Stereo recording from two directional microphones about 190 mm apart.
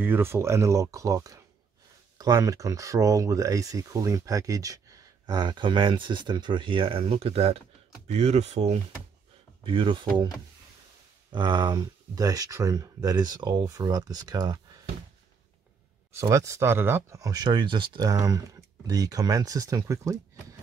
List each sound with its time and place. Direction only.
0.0 s speech: 10° right (ahead or behind)
11.3 s speech: 25° right (ahead or behind)
16.2 s speech: 15° right (ahead or behind)